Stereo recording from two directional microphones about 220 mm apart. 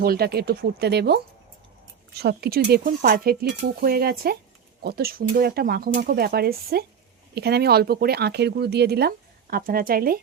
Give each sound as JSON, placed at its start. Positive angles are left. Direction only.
{"t": 0.0, "sound": "speech", "side_deg": -45}